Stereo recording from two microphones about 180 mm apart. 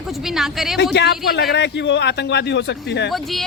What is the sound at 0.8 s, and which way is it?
A man's voice, 70° left (ahead or behind).